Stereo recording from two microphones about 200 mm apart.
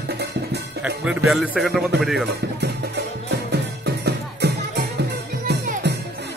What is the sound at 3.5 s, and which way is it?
Music, 55° right (ahead or behind).